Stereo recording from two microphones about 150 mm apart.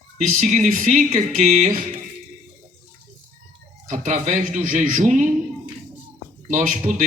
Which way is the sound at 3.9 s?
55° right (ahead or behind).